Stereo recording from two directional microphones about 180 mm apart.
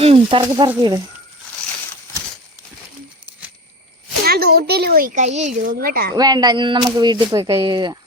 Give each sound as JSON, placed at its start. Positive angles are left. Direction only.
{"t": 0.0, "sound": "speech", "side_deg": -30}
{"t": 0.4, "sound": "speech", "side_deg": -20}
{"t": 4.2, "sound": "a sound", "side_deg": -60}
{"t": 6.1, "sound": "speech", "side_deg": -20}